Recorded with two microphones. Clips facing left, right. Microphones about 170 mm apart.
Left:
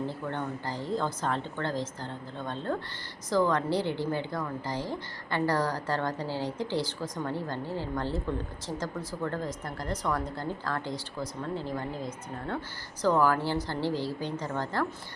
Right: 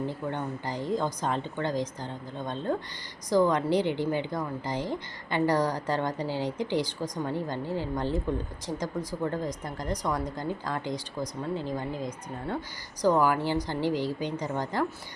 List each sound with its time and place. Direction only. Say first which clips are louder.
0.1 s a woman's voice: right 1 dB; 15° right (ahead or behind)